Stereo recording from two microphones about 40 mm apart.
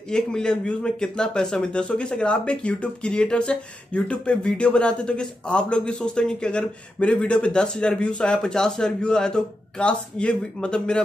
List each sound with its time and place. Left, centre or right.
0.1 s a man's voice: centre